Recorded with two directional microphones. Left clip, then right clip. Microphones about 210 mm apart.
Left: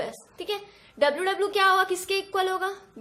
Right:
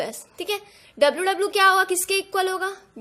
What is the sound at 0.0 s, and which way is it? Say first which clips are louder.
A woman's voice: right 4 dB; 35° right (ahead or behind).